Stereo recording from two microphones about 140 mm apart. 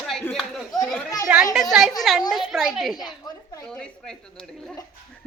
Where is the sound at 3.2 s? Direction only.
30° left (ahead or behind).